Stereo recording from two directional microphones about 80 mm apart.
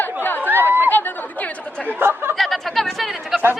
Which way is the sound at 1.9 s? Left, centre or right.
Right.